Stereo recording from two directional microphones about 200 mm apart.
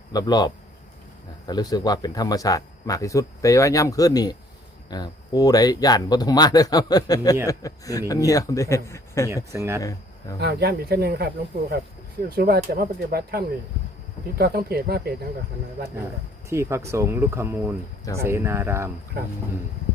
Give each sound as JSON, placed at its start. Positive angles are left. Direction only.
{"t": 0.1, "sound": "speech", "side_deg": 20}
{"t": 9.3, "sound": "speech", "side_deg": -15}
{"t": 10.4, "sound": "speech", "side_deg": -55}
{"t": 12.3, "sound": "speech", "side_deg": -50}
{"t": 16.5, "sound": "speech", "side_deg": -15}